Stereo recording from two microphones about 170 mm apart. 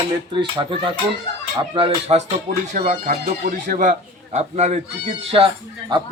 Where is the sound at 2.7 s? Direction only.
50° right (ahead or behind); by 5.5 s 35° right (ahead or behind).